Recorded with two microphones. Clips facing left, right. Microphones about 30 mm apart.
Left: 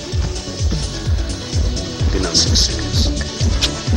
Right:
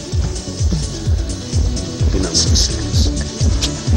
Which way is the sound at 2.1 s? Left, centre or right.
Left.